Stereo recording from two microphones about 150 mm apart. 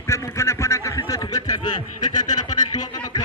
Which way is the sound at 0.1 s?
20° left (ahead or behind).